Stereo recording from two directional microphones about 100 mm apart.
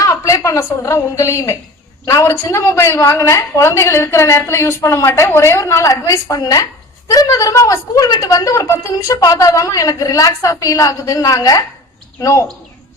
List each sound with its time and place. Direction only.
0.0 s a woman's voice: 35° left (ahead or behind)